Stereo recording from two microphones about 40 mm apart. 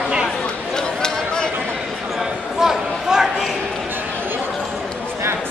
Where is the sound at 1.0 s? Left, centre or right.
Centre.